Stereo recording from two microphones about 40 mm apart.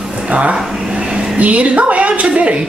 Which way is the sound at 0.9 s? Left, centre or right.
Right.